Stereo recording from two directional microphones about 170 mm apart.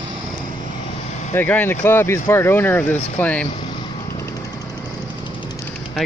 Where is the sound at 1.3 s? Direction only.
10° left (ahead or behind).